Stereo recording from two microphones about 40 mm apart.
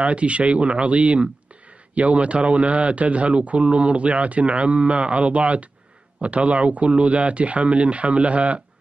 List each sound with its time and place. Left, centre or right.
0.0 s speech: right